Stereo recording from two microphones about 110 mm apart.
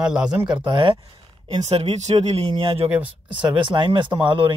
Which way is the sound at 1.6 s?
70° right (ahead or behind).